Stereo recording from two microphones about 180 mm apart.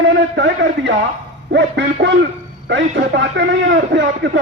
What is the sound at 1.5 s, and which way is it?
A man's voice, 75° right (ahead or behind).